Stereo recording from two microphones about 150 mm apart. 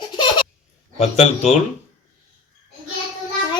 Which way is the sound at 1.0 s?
50° left (ahead or behind).